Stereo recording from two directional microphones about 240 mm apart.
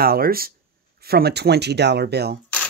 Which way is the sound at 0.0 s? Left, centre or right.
Right.